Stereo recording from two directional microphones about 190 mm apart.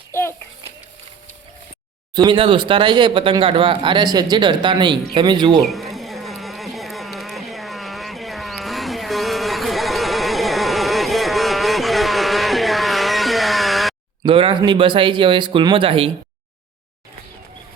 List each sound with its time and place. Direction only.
0.1 s a child's voice: 15° left (ahead or behind)
2.1 s speech: 25° right (ahead or behind)
5.6 s a sound: centre (ahead or behind)
14.3 s speech: 25° right (ahead or behind)